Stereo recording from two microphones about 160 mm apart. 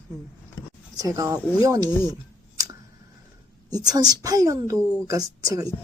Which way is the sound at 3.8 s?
25° right (ahead or behind).